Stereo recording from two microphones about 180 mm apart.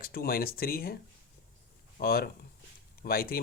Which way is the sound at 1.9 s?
60° left (ahead or behind).